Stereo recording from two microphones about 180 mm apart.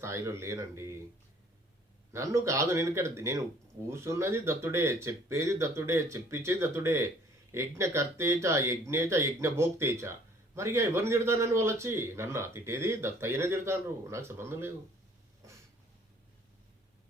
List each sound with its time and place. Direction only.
0.0 s speech: 15° right (ahead or behind)
2.1 s speech: 15° right (ahead or behind)